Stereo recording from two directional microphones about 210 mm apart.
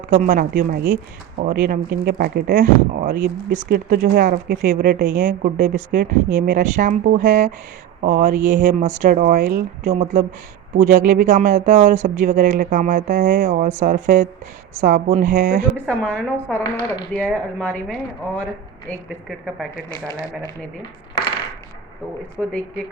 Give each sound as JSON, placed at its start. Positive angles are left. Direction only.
{"t": 0.1, "sound": "speech", "side_deg": -35}
{"t": 5.2, "sound": "speech", "side_deg": -35}
{"t": 15.9, "sound": "a woman's voice", "side_deg": 5}
{"t": 20.1, "sound": "speech", "side_deg": -15}
{"t": 22.4, "sound": "a woman's voice", "side_deg": -5}